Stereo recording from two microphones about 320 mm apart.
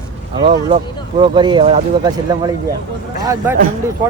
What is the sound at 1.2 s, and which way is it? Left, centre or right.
Speech, centre.